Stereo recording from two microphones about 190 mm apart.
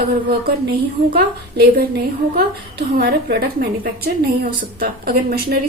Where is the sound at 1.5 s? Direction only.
55° right (ahead or behind).